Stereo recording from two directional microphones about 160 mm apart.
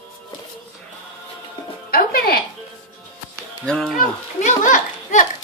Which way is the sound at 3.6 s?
5° left (ahead or behind).